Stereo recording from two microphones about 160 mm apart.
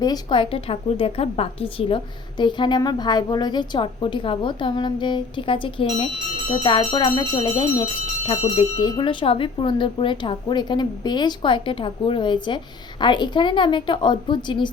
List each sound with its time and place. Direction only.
0.0 s a woman's voice: 25° left (ahead or behind)
8.3 s a woman's voice: 35° left (ahead or behind)